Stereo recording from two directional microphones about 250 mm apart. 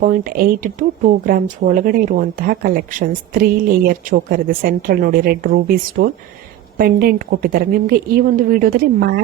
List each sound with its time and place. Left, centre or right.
0.0 s speech: right